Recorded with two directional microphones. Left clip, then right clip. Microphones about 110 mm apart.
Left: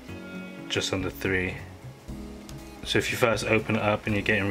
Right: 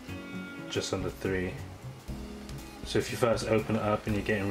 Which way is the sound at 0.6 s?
30° left (ahead or behind).